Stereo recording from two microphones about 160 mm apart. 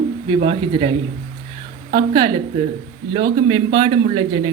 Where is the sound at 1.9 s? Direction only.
30° right (ahead or behind).